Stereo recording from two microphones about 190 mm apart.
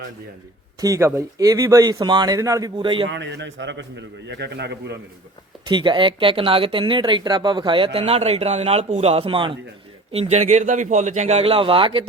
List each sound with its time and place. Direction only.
0.8 s speech: 15° right (ahead or behind)
3.1 s a man's voice: 70° right (ahead or behind)
5.6 s a man's voice: 25° right (ahead or behind)